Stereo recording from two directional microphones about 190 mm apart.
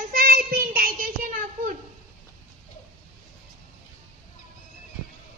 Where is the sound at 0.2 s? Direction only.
50° right (ahead or behind).